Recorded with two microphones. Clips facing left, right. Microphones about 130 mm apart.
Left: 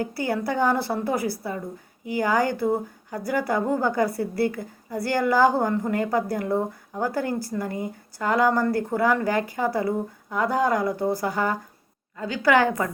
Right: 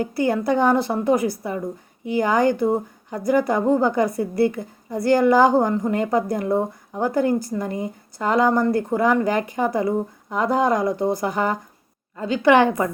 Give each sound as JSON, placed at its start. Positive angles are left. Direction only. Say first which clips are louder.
{"t": 0.0, "sound": "a woman's voice", "louder": "right 5 dB", "side_deg": -20}